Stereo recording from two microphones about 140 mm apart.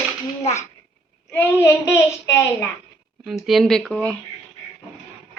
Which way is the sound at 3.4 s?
Centre (ahead or behind).